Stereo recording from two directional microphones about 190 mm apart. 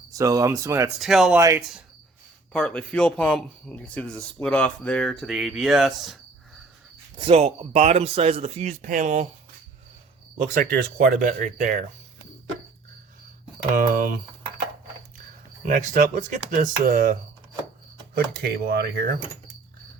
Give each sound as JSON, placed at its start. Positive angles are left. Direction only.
{"t": 0.1, "sound": "speech", "side_deg": -20}
{"t": 0.9, "sound": "speech", "side_deg": 0}
{"t": 1.4, "sound": "speech", "side_deg": -15}
{"t": 2.5, "sound": "speech", "side_deg": 5}
{"t": 7.2, "sound": "speech", "side_deg": -30}
{"t": 10.3, "sound": "speech", "side_deg": -45}
{"t": 13.7, "sound": "speech", "side_deg": -45}
{"t": 15.6, "sound": "speech", "side_deg": -40}
{"t": 18.3, "sound": "speech", "side_deg": -55}